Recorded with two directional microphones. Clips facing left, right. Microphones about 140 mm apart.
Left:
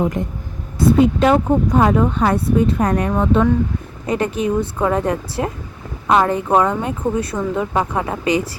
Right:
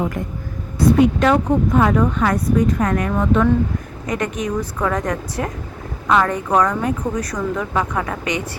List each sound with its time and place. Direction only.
0.0 s a woman's voice: 20° left (ahead or behind)